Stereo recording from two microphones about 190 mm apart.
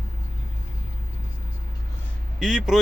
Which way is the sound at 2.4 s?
Centre (ahead or behind).